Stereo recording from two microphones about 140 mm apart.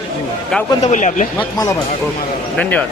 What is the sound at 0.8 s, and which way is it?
Speech, 60° left (ahead or behind).